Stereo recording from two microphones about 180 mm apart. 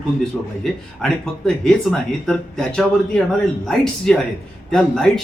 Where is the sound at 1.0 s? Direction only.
Centre (ahead or behind).